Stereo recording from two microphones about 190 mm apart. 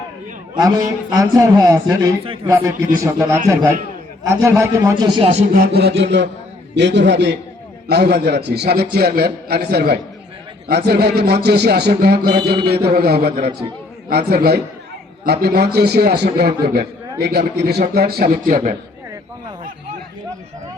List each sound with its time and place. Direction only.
0.5 s a man's voice: 20° right (ahead or behind)
2.2 s a man's voice: 30° right (ahead or behind)
2.5 s a man's voice: 15° right (ahead or behind)
5.2 s speech: 35° right (ahead or behind)
5.5 s a man's voice: 55° right (ahead or behind)